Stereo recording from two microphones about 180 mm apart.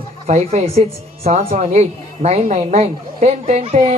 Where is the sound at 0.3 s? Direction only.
40° right (ahead or behind).